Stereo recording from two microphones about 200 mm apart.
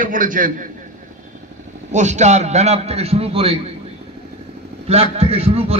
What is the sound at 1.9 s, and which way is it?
A man's voice, 35° right (ahead or behind).